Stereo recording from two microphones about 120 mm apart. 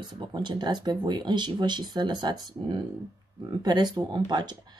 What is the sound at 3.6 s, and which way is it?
Speech, 35° right (ahead or behind).